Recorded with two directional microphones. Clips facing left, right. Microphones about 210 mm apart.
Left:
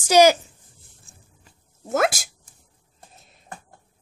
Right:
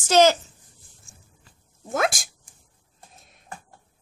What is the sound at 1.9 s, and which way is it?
Speech, 5° left (ahead or behind).